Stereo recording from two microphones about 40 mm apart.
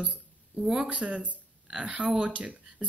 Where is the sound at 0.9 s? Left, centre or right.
Right.